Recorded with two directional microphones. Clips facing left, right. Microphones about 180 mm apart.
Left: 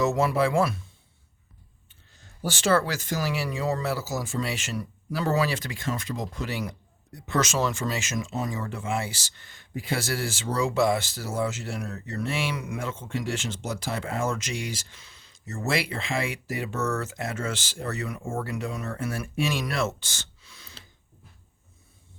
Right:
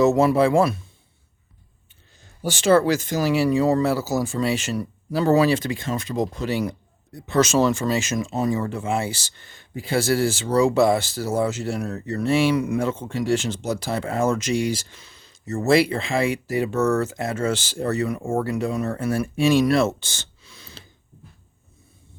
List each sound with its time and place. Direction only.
0.0 s speech: 25° right (ahead or behind)
2.4 s speech: 15° right (ahead or behind)